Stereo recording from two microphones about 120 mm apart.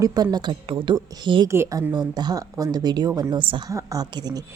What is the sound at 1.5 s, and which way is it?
A woman's voice, 25° right (ahead or behind).